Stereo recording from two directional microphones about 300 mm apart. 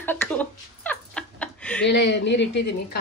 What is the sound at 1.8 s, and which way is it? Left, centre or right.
A woman's voice, left.